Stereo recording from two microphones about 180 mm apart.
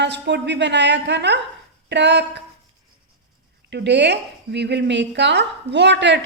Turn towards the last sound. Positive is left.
turn(degrees=-75)  # may be behind; listen again after turning